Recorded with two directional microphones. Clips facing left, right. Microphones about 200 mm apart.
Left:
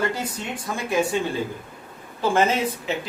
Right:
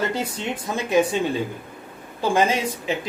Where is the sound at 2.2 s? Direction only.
15° right (ahead or behind).